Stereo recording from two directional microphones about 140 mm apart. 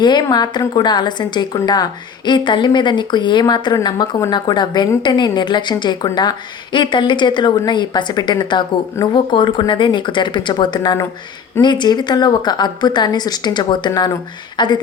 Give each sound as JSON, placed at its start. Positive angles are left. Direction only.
{"t": 0.0, "sound": "a woman's voice", "side_deg": 30}